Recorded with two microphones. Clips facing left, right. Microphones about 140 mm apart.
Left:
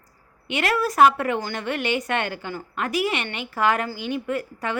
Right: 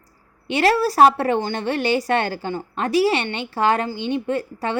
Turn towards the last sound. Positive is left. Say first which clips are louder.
# right 3 dB
turn(degrees=-30)  # may be behind; listen again after turning